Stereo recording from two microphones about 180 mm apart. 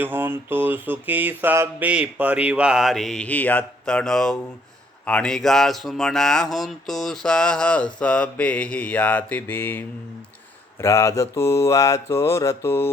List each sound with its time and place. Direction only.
0.0 s mantra: 10° right (ahead or behind)
5.0 s speech: 5° left (ahead or behind)
10.8 s mantra: 15° left (ahead or behind)